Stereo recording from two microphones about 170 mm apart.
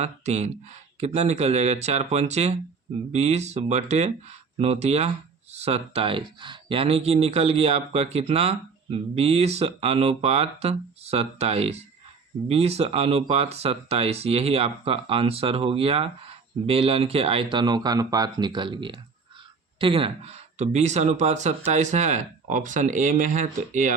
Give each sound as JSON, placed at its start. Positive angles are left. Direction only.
{"t": 0.0, "sound": "speech", "side_deg": -40}